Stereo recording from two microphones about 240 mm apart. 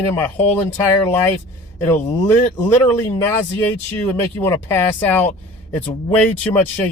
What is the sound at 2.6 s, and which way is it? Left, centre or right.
Speech, centre.